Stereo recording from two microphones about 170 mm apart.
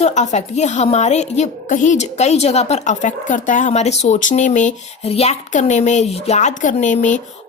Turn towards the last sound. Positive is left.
turn(degrees=45)  # may be behind; listen again after turning